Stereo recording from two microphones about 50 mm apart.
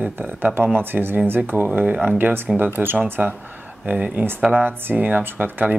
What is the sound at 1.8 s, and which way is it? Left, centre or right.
Speech, right.